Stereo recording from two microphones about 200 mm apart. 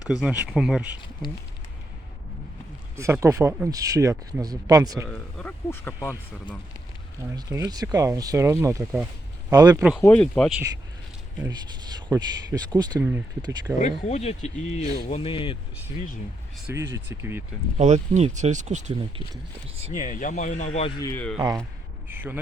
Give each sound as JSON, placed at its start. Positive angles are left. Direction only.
{"t": 0.1, "sound": "speech", "side_deg": -5}
{"t": 2.9, "sound": "speech", "side_deg": -15}
{"t": 5.0, "sound": "speech", "side_deg": 5}
{"t": 7.3, "sound": "speech", "side_deg": -15}
{"t": 10.0, "sound": "speech", "side_deg": 5}
{"t": 11.4, "sound": "speech", "side_deg": -20}
{"t": 13.7, "sound": "speech", "side_deg": 35}
{"t": 16.7, "sound": "speech", "side_deg": -10}
{"t": 17.7, "sound": "speech", "side_deg": -35}
{"t": 19.9, "sound": "speech", "side_deg": 40}
{"t": 21.0, "sound": "speech", "side_deg": 15}
{"t": 21.3, "sound": "speech", "side_deg": -20}
{"t": 22.1, "sound": "speech", "side_deg": -10}